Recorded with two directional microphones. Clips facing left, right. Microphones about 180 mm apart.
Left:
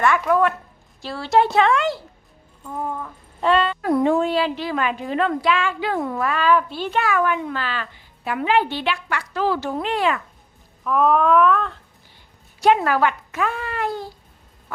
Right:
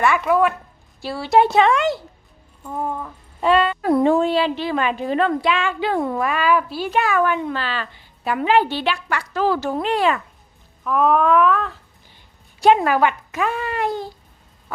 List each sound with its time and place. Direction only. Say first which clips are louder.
0.0 s a woman's voice: right 1 dB; 5° right (ahead or behind)
3.0 s a sound: right 1 dB; 10° right (ahead or behind)
3.8 s a woman's voice: right 2 dB; 30° right (ahead or behind)
5.4 s a woman's voice: right 1 dB; 20° right (ahead or behind)
6.2 s a woman's voice: left 4 dB; 10° right (ahead or behind)
7.0 s a woman's voice: right 1 dB; 30° right (ahead or behind)
10.8 s a sound: right 1 dB; centre (ahead or behind)
12.6 s a woman's voice: right 2 dB; 20° right (ahead or behind)